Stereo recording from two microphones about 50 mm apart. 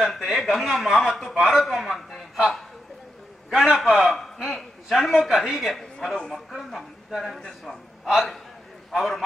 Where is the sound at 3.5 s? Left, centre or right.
Centre.